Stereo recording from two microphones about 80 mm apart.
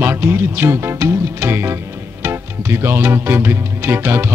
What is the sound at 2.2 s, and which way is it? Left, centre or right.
Music, right.